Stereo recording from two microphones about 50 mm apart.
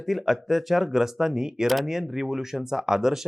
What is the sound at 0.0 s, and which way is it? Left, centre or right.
Speech, centre.